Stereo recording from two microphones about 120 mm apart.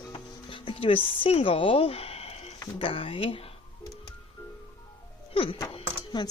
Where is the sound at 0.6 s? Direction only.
45° left (ahead or behind).